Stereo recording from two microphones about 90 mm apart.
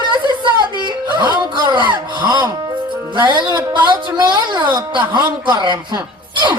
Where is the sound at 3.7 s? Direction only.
55° right (ahead or behind).